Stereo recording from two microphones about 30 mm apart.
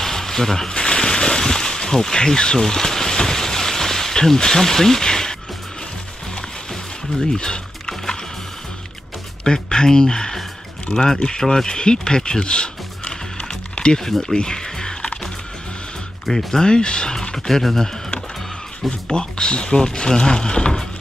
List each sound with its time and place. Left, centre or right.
0.0 s a sound: centre
6.7 s a sound: centre
7.3 s wild animals: left
9.4 s speech: left
14.2 s a sound: left
16.3 s speech: centre
16.6 s speech: left
17.5 s speech: centre
18.9 s speech: left